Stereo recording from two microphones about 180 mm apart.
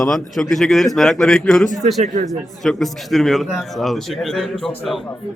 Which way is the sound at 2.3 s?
Centre (ahead or behind).